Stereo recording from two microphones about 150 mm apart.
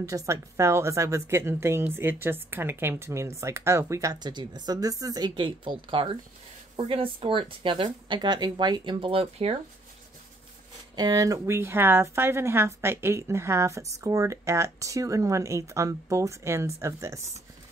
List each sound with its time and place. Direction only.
0.0 s speech: 20° right (ahead or behind); by 9.6 s 40° right (ahead or behind)
11.0 s speech: 25° right (ahead or behind)